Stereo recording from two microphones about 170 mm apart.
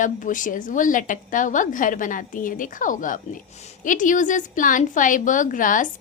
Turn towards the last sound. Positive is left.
turn(degrees=50)  # may be behind; listen again after turning